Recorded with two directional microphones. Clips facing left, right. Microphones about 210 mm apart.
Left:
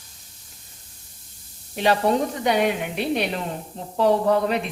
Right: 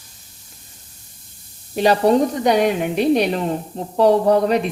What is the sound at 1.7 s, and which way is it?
Speech, 40° right (ahead or behind).